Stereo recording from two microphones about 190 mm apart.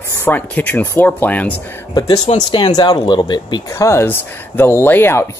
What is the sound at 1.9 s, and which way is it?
Speech, 20° left (ahead or behind).